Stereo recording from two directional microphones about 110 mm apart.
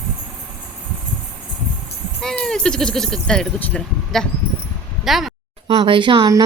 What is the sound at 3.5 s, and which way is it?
Speech, 15° left (ahead or behind).